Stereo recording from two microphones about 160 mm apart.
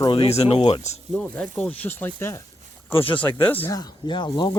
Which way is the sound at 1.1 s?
5° left (ahead or behind).